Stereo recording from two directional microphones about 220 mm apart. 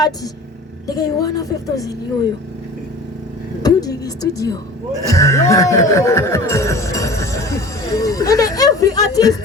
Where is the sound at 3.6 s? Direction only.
15° left (ahead or behind).